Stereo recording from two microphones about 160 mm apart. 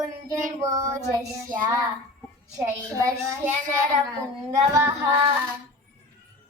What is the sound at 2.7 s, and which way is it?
Child singing, 20° right (ahead or behind).